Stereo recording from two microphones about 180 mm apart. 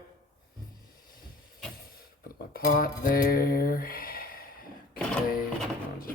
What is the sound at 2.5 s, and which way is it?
Mantra, 55° left (ahead or behind).